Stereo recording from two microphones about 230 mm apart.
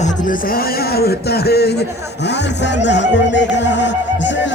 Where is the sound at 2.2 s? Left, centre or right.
Left.